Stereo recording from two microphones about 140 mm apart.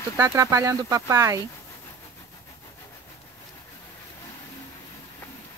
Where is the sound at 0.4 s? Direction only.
25° right (ahead or behind).